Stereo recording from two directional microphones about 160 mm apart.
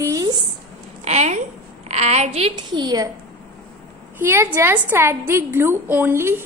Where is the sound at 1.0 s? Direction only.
45° right (ahead or behind); by 3.1 s 25° right (ahead or behind).